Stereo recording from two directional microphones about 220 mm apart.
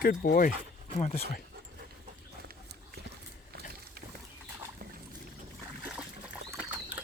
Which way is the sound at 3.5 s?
45° right (ahead or behind).